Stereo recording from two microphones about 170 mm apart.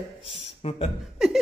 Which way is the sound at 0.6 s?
40° left (ahead or behind).